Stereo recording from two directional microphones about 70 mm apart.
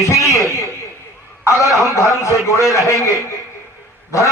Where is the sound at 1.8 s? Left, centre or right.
Left.